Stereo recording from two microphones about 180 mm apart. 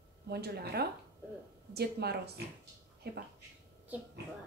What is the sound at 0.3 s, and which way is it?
Speech, 60° right (ahead or behind).